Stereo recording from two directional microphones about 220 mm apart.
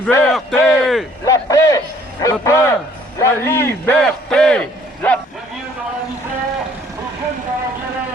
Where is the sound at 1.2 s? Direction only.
15° left (ahead or behind).